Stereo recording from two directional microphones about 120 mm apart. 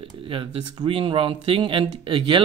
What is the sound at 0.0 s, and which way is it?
Speech, 50° right (ahead or behind).